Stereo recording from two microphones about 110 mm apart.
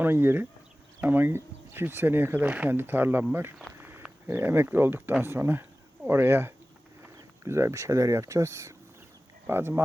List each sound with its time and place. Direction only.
0.0 s speech: 20° right (ahead or behind)
3.8 s pig: 20° right (ahead or behind)
4.3 s speech: 20° right (ahead or behind)